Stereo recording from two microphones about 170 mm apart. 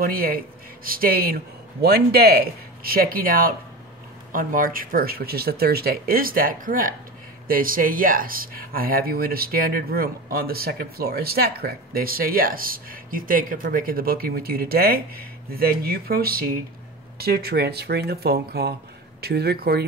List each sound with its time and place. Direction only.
0.0 s speech: 60° right (ahead or behind)